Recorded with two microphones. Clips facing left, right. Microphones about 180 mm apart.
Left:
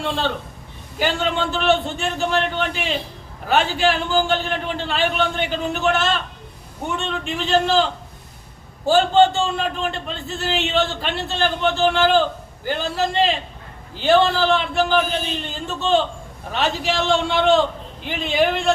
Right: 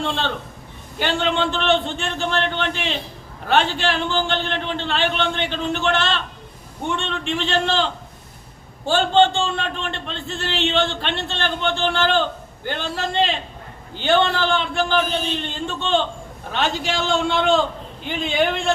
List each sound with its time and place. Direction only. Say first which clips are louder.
0.0 s a man's voice: left 1 dB; 5° left (ahead or behind)
8.9 s a man's voice: left 2 dB; 5° left (ahead or behind)